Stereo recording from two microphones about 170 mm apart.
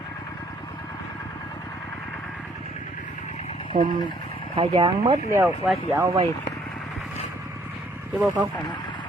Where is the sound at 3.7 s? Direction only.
30° right (ahead or behind).